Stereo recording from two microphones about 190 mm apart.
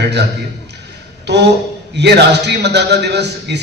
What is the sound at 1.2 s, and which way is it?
A man's voice, 65° right (ahead or behind).